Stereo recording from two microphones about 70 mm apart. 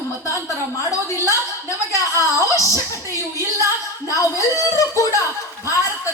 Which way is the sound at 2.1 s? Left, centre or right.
Left.